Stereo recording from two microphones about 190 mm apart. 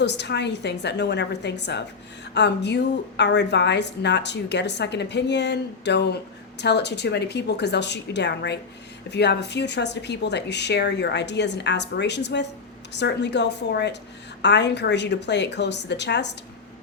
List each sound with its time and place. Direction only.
0.0 s a woman's voice: 65° left (ahead or behind)